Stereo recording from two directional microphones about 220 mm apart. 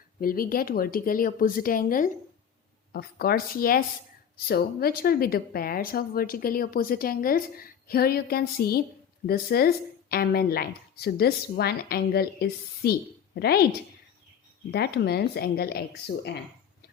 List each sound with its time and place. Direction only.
0.2 s a woman's voice: 40° left (ahead or behind)
14.7 s a woman's voice: 45° left (ahead or behind)